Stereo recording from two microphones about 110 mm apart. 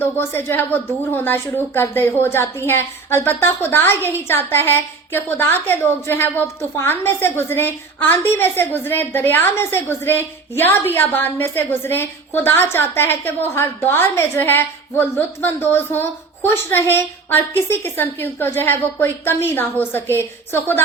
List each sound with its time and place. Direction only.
0.0 s a woman's voice: 20° left (ahead or behind)